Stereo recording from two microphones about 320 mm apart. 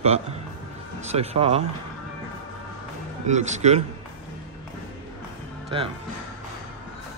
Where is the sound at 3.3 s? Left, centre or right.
Right.